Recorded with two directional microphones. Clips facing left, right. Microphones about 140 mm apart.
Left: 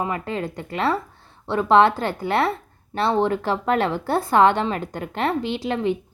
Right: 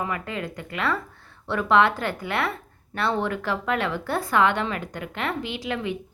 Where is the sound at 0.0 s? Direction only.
30° left (ahead or behind).